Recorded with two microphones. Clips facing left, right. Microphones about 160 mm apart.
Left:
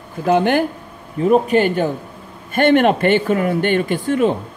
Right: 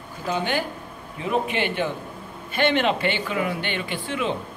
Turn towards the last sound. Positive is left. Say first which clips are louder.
# left 10 dB
turn(degrees=45)  # may be behind; listen again after turning